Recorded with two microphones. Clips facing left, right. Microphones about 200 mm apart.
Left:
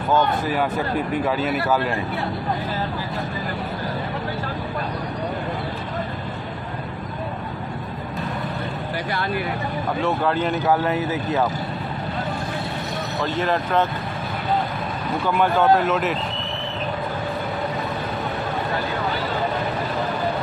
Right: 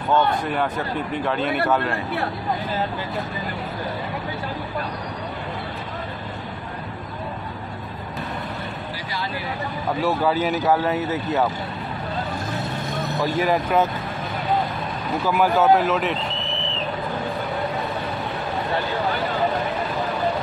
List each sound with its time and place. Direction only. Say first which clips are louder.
0.1 s speech: even; 5° left (ahead or behind)
9.1 s speech: left 4 dB; 55° left (ahead or behind)
10.0 s speech: right 1 dB; 5° right (ahead or behind)
13.2 s speech: right 2 dB; 10° right (ahead or behind)
15.2 s speech: right 1 dB; 5° right (ahead or behind)